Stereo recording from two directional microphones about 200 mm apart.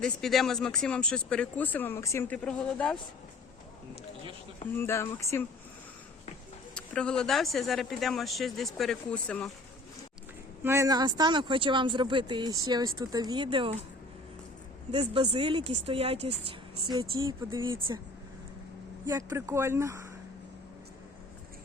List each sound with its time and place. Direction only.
0.0 s speech: centre (ahead or behind)
4.7 s speech: 10° left (ahead or behind)
6.7 s speech: 5° left (ahead or behind)
10.6 s speech: 15° right (ahead or behind)
14.9 s speech: 25° right (ahead or behind)
17.2 s speech: 15° right (ahead or behind)
19.0 s speech: 15° right (ahead or behind)